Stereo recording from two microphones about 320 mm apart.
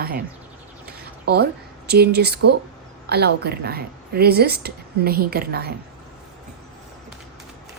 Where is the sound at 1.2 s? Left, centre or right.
Right.